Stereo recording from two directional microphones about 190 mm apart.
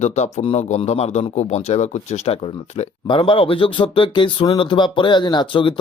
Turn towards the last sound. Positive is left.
turn(degrees=25)  # may be behind; listen again after turning